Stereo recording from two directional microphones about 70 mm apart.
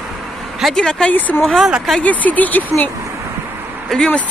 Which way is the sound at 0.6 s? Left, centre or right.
Centre.